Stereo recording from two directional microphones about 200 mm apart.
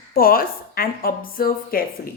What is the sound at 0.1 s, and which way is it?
A woman's voice, 45° left (ahead or behind).